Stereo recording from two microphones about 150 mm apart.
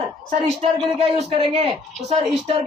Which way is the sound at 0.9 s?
40° right (ahead or behind).